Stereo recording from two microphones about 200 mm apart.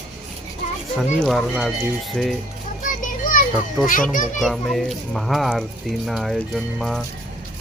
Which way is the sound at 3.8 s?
Centre (ahead or behind).